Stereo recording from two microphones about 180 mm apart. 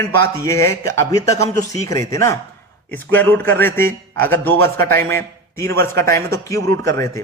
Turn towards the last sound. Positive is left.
turn(degrees=15)  # may be behind; listen again after turning